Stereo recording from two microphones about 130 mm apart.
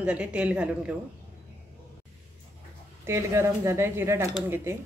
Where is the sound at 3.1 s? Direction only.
20° right (ahead or behind).